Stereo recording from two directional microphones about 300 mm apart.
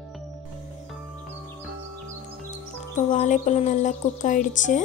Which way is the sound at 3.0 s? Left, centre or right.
Left.